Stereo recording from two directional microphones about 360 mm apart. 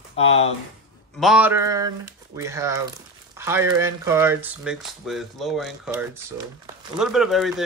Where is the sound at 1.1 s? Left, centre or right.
Centre.